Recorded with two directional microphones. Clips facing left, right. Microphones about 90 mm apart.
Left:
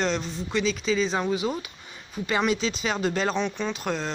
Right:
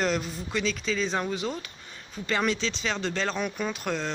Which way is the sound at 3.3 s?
5° right (ahead or behind).